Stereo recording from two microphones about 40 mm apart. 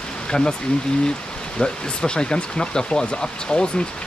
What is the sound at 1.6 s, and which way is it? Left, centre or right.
Speech, left.